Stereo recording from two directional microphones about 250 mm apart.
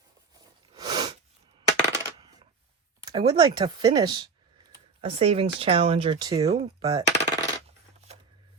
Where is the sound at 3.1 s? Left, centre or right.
Centre.